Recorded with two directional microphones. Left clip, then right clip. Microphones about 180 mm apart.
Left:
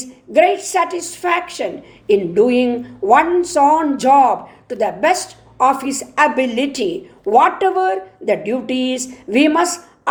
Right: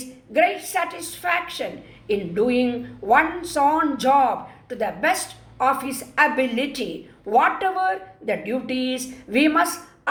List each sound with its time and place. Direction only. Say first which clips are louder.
0.0 s a woman's voice: left 6 dB; 40° left (ahead or behind)